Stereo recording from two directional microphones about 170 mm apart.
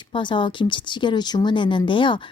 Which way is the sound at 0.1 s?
30° left (ahead or behind).